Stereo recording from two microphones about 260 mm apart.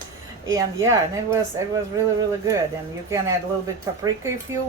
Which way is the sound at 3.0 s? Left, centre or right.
Centre.